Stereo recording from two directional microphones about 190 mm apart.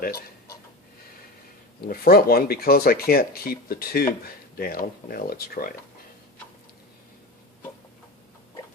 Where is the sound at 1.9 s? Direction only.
50° left (ahead or behind).